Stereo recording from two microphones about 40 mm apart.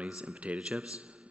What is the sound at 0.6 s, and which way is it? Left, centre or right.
Speech, centre.